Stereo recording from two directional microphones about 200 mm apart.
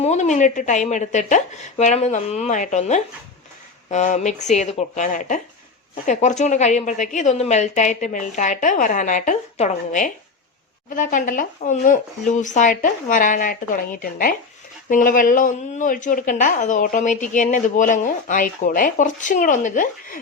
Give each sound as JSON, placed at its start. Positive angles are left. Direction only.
{"t": 0.0, "sound": "a woman's voice", "side_deg": 35}